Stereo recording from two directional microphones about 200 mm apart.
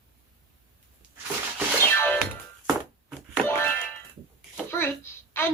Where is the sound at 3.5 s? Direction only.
10° left (ahead or behind).